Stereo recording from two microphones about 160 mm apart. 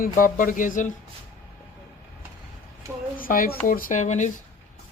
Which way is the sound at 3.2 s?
60° left (ahead or behind).